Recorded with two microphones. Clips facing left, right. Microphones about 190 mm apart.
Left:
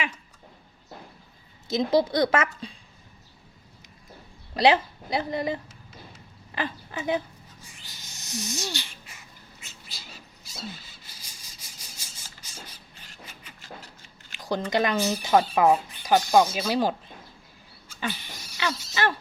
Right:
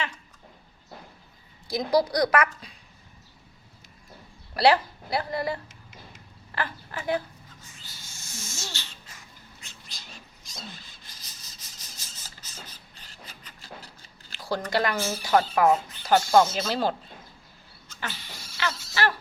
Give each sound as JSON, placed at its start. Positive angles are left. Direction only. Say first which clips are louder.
{"t": 1.6, "sound": "a woman's voice", "louder": "left 1 dB", "side_deg": 25}
{"t": 4.5, "sound": "speech", "louder": "even", "side_deg": 20}
{"t": 7.6, "sound": "owl", "louder": "left 1 dB", "side_deg": 15}
{"t": 9.6, "sound": "cat", "louder": "left 2 dB", "side_deg": 5}
{"t": 10.4, "sound": "squeal", "louder": "left 5 dB", "side_deg": 5}
{"t": 14.3, "sound": "speech", "louder": "left 2 dB", "side_deg": 20}
{"t": 17.8, "sound": "a sound", "louder": "left 5 dB", "side_deg": 15}